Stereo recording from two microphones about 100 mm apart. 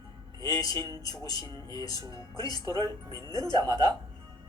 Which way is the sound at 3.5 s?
45° right (ahead or behind).